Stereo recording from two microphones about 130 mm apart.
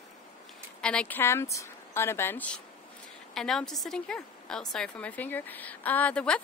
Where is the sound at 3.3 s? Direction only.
5° left (ahead or behind).